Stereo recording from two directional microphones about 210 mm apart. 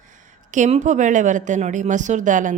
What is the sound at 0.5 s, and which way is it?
A woman's voice, 35° right (ahead or behind).